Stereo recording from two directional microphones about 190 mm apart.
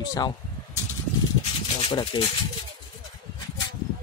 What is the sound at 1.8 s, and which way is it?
Speech, 25° left (ahead or behind).